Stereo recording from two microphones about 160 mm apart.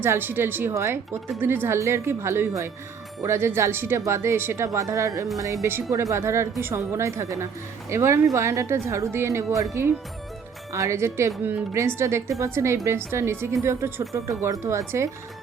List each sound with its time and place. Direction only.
0.0 s speech: 15° right (ahead or behind)
10.7 s speech: 20° right (ahead or behind)